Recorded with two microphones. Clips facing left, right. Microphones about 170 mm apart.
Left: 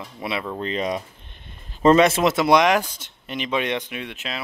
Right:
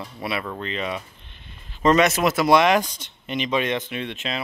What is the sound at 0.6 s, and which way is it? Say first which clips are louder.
Speech: left 3 dB; 40° left (ahead or behind).